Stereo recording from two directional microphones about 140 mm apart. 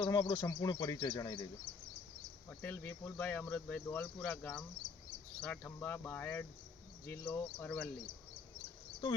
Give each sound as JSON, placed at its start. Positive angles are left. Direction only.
{"t": 0.0, "sound": "speech", "side_deg": 40}
{"t": 2.5, "sound": "speech", "side_deg": 10}